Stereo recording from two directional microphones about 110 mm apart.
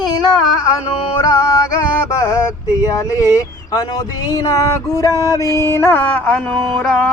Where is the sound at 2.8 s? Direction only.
35° left (ahead or behind).